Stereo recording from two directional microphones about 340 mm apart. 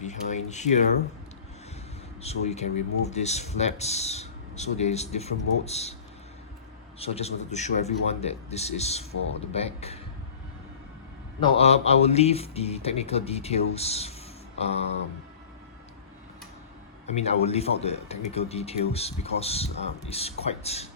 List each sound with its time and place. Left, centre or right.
0.0 s a sound: left
2.2 s speech: centre
7.0 s a man's voice: centre
11.3 s a man's voice: centre
17.1 s a man's voice: centre